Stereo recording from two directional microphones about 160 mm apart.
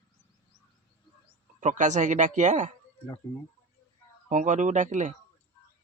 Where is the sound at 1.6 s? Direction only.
50° right (ahead or behind).